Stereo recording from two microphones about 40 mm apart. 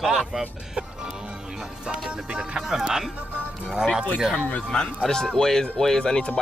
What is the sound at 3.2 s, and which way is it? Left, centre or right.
Music, right.